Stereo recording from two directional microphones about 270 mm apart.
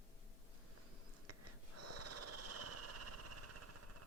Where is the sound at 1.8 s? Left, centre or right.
Right.